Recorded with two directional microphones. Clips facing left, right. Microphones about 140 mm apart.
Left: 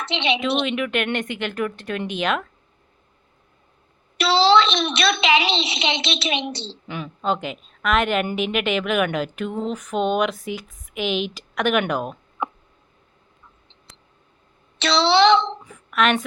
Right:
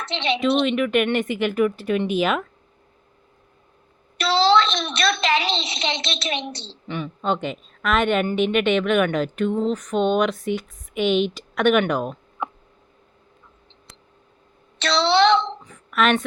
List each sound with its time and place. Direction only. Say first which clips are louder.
0.0 s a woman's voice: right 1 dB; centre (ahead or behind)
4.5 s a sound: left 2 dB; centre (ahead or behind)
5.6 s a woman's voice: left 2 dB; 5° left (ahead or behind)
14.8 s a woman's voice: left 1 dB; 5° left (ahead or behind)